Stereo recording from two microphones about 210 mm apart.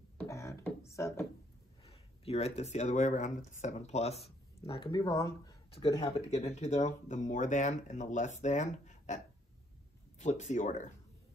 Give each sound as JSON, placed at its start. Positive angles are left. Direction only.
{"t": 0.2, "sound": "beatboxing", "side_deg": 15}
{"t": 1.9, "sound": "speech", "side_deg": 30}